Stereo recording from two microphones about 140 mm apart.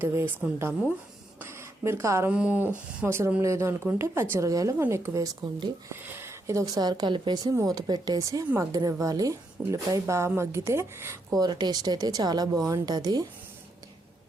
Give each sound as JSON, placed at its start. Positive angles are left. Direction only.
{"t": 0.0, "sound": "speech", "side_deg": -15}
{"t": 2.3, "sound": "speech", "side_deg": -10}